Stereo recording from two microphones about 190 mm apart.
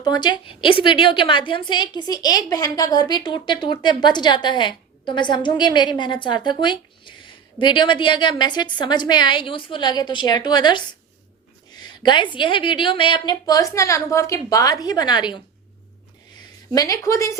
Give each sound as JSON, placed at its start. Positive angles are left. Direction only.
{"t": 0.0, "sound": "a woman's voice", "side_deg": 20}
{"t": 16.4, "sound": "a woman's voice", "side_deg": 20}